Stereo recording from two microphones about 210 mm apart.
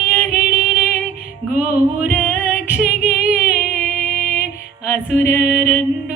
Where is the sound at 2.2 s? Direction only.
10° left (ahead or behind).